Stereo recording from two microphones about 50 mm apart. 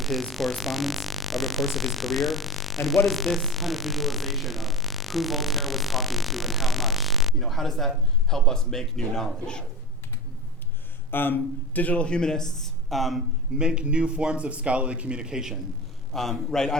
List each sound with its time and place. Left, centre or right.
0.0 s speech: centre
11.1 s a man's voice: left
12.0 s speech: centre
13.6 s speech: centre
16.1 s speech: centre